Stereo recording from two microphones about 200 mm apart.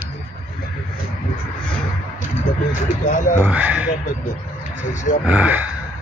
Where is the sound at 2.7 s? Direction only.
40° left (ahead or behind).